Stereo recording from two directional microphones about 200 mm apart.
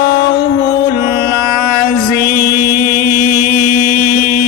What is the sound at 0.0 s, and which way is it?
Music, 55° left (ahead or behind).